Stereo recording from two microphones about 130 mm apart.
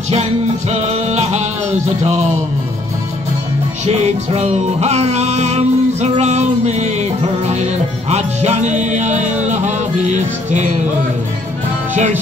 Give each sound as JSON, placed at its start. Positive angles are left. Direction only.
{"t": 0.1, "sound": "music", "side_deg": -55}
{"t": 3.8, "sound": "music", "side_deg": -55}
{"t": 11.9, "sound": "music", "side_deg": -65}